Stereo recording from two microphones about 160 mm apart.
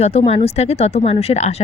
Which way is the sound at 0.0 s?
40° left (ahead or behind).